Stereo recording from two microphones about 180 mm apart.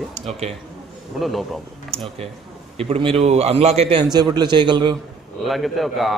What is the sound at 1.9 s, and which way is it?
A man's voice, 35° right (ahead or behind).